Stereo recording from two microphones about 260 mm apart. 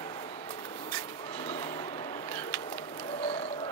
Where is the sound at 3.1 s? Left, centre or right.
Left.